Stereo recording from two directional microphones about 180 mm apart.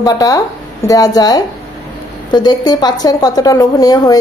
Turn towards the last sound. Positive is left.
turn(degrees=20)  # may be behind; listen again after turning